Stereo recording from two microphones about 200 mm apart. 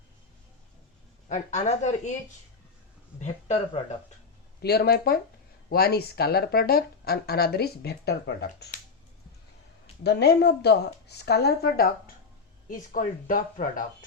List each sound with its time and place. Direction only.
1.3 s speech: 35° left (ahead or behind)
3.2 s speech: 35° left (ahead or behind)
4.6 s speech: 50° left (ahead or behind)
10.0 s speech: 55° left (ahead or behind)